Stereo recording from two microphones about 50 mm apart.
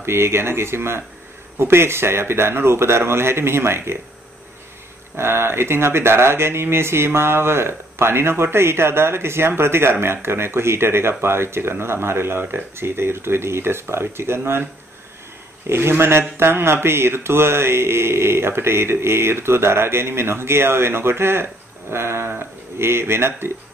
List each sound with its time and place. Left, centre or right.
0.0 s speech: right
5.1 s speech: right
15.7 s speech: right